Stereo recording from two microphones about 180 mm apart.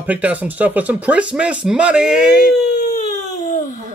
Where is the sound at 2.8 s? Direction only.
45° left (ahead or behind).